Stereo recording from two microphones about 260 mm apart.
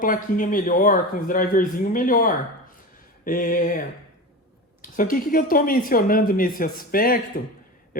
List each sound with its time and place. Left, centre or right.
0.0 s speech: left